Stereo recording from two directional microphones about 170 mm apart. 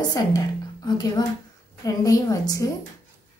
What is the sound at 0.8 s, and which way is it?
A woman's voice, 25° left (ahead or behind).